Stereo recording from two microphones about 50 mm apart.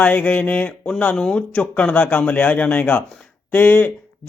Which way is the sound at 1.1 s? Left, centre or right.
Centre.